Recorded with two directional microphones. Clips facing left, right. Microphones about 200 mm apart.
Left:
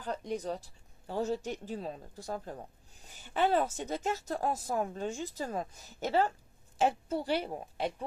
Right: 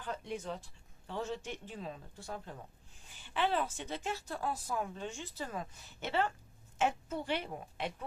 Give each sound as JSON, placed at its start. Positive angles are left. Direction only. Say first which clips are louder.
{"t": 0.0, "sound": "speech", "louder": "left 5 dB", "side_deg": 40}